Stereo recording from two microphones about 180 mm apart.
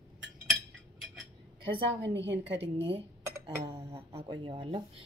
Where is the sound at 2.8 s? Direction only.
30° right (ahead or behind).